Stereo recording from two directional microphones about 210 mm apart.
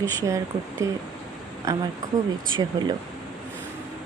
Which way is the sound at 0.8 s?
15° right (ahead or behind).